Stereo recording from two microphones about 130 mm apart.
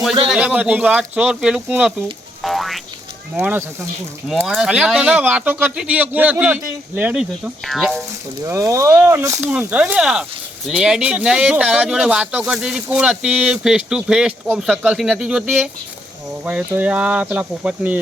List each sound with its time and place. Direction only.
0.3 s speech: 10° right (ahead or behind)
2.4 s music: centre (ahead or behind)
3.3 s speech: 15° right (ahead or behind)
4.3 s speech: centre (ahead or behind)
7.6 s speech: centre (ahead or behind)
8.4 s speech: 25° right (ahead or behind)
9.4 s speech: 10° right (ahead or behind)
14.4 s speech: 5° left (ahead or behind)
14.8 s speech: 5° right (ahead or behind)